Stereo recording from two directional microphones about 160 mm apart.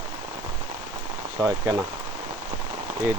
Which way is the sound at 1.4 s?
20° right (ahead or behind).